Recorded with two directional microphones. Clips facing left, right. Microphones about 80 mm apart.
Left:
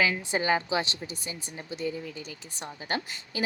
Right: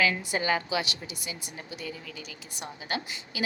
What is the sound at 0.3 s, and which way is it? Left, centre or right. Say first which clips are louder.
A woman's voice: left 2 dB; left.